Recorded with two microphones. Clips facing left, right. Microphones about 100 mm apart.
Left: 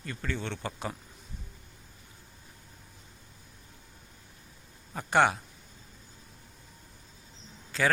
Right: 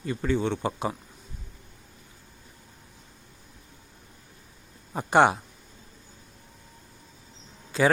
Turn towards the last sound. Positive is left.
turn(degrees=-15)  # may be behind; listen again after turning